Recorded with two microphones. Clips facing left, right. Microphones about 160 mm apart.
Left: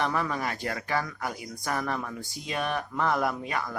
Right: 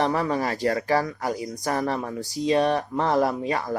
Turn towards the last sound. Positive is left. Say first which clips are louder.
# right 6 dB
turn(degrees=-30)  # may be behind; listen again after turning